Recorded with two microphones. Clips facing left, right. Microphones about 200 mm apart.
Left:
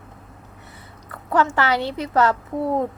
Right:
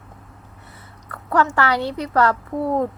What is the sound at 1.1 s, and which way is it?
A woman's voice, 25° left (ahead or behind).